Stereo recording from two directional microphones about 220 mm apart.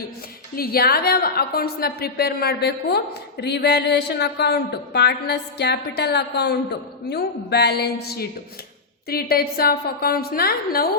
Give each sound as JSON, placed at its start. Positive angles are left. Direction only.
{"t": 0.5, "sound": "a woman's voice", "side_deg": 45}